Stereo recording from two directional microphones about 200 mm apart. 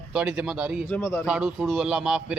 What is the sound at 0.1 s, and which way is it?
Speech, 5° right (ahead or behind).